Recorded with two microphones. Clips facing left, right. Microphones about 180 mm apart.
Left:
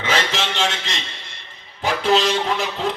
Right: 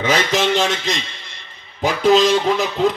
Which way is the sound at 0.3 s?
40° right (ahead or behind).